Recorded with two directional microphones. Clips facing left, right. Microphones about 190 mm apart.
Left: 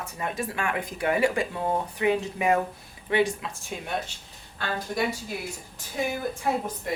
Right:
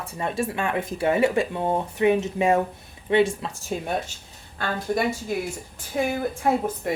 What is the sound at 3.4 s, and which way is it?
Speech, 40° right (ahead or behind).